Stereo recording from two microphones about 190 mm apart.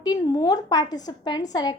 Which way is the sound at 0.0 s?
20° left (ahead or behind).